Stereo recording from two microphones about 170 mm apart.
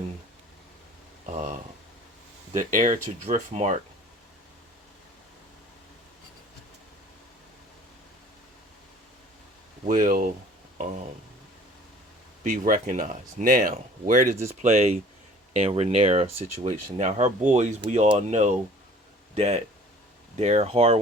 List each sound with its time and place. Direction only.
1.3 s speech: 45° right (ahead or behind)
9.8 s speech: 50° right (ahead or behind)
12.4 s speech: 50° right (ahead or behind)
14.6 s speech: 40° right (ahead or behind)